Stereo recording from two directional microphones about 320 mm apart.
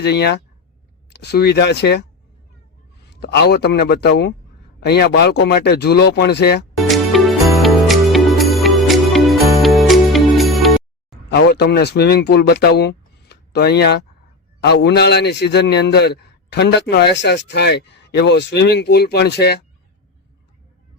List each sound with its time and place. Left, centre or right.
0.0 s a man's voice: left
3.1 s a man's voice: left
6.8 s music: centre
11.3 s a man's voice: left